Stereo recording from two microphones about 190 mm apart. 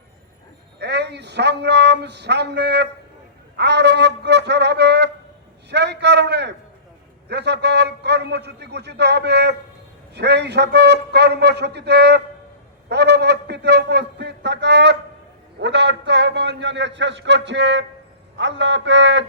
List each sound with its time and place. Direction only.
0.8 s a man's voice: 65° right (ahead or behind)